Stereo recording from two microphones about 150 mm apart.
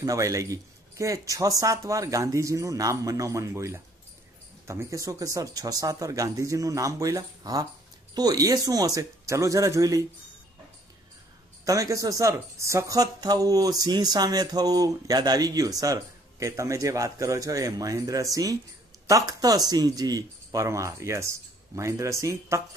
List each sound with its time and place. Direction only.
0.0 s speech: 20° right (ahead or behind)
11.6 s speech: 20° right (ahead or behind)